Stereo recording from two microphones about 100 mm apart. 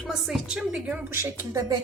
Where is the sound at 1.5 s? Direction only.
35° right (ahead or behind).